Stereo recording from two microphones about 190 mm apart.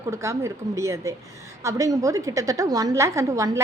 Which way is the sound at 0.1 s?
15° right (ahead or behind).